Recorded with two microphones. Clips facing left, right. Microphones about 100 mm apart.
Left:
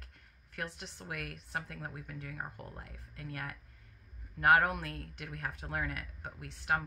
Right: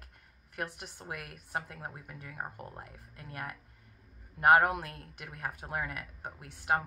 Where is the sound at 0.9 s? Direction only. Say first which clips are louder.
Right 2 dB; 50° right (ahead or behind).